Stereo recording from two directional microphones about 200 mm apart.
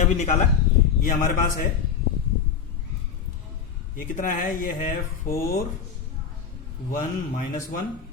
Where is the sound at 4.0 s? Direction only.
40° left (ahead or behind).